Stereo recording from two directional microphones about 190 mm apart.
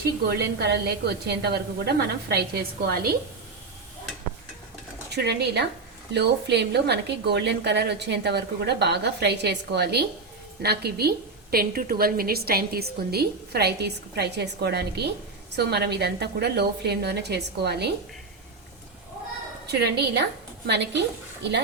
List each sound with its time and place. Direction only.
0.3 s a woman's voice: 60° right (ahead or behind)
5.1 s a woman's voice: 60° right (ahead or behind)
19.6 s a woman's voice: 60° right (ahead or behind)